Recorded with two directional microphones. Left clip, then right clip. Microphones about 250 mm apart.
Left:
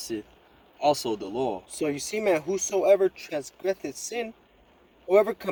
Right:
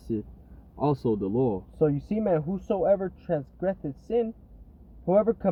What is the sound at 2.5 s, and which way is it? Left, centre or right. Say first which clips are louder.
Speech: left 3 dB; left.